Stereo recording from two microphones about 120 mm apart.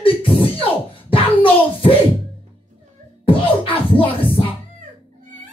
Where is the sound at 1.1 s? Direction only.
50° left (ahead or behind).